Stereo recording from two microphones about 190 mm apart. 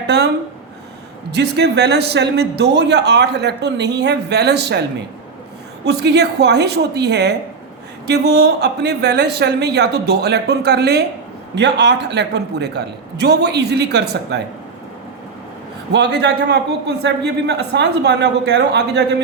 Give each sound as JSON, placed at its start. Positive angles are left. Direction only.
{"t": 1.3, "sound": "a man's voice", "side_deg": -60}
{"t": 15.9, "sound": "a man's voice", "side_deg": -65}